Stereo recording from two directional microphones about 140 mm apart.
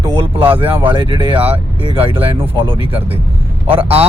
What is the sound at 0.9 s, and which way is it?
Speech, 40° right (ahead or behind).